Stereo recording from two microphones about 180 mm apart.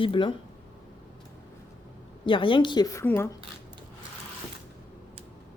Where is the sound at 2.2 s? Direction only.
30° left (ahead or behind).